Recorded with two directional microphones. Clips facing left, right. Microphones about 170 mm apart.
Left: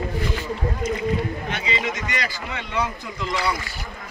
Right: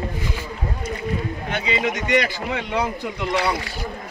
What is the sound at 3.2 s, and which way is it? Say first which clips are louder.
Speech: right 3 dB; 65° right (ahead or behind).